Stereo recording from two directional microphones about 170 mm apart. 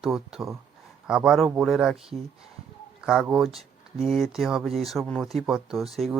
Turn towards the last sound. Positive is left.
turn(degrees=0)  # may be behind; listen again after turning